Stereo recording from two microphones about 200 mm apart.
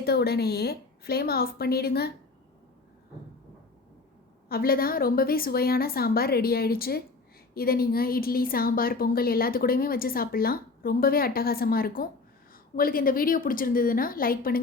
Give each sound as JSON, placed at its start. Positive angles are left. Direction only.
{"t": 0.0, "sound": "a woman's voice", "side_deg": 50}
{"t": 4.4, "sound": "a woman's voice", "side_deg": 50}